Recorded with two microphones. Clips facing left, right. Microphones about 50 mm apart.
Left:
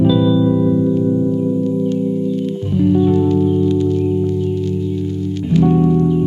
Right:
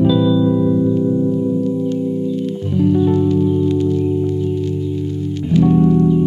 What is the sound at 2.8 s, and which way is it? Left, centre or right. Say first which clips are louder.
Music: left 1 dB; centre.